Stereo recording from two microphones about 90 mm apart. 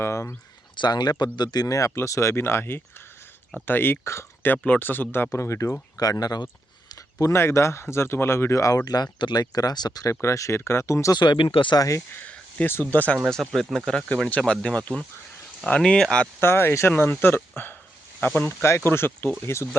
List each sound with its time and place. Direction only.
0.0 s speech: 30° left (ahead or behind)
0.8 s speech: 50° left (ahead or behind); by 4.5 s 30° left (ahead or behind)
4.5 s speech: 20° left (ahead or behind)
5.3 s speech: 35° left (ahead or behind)
6.0 s speech: 45° left (ahead or behind)
10.2 s speech: 35° left (ahead or behind)
11.2 s speech: 60° left (ahead or behind)
11.8 s speech: 35° left (ahead or behind)
12.1 s speech: 15° left (ahead or behind)
13.3 s speech: 5° left (ahead or behind)
16.4 s speech: 25° left (ahead or behind)